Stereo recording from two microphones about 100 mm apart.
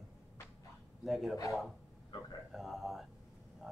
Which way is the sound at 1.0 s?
Centre (ahead or behind).